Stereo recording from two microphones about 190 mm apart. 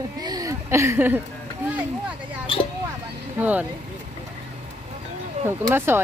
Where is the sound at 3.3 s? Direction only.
10° right (ahead or behind).